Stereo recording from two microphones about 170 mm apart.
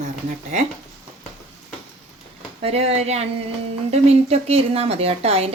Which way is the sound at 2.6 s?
35° right (ahead or behind).